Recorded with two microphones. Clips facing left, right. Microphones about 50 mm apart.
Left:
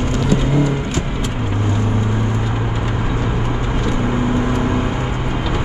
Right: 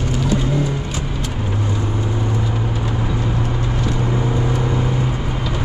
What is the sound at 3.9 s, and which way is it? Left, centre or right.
Vehicle, left.